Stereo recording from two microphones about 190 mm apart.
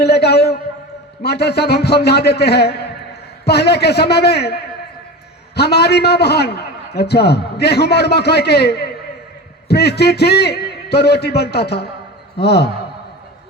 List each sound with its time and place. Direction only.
0.0 s a man's voice: 60° left (ahead or behind)